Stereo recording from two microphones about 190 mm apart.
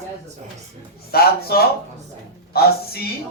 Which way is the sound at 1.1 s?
55° left (ahead or behind).